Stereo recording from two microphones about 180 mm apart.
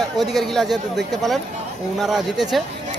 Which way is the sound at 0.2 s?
Centre (ahead or behind).